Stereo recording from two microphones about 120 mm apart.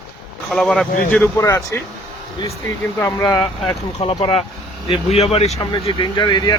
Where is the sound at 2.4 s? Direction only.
35° left (ahead or behind).